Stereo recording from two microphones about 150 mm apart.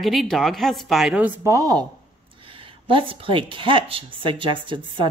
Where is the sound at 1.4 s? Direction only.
25° right (ahead or behind).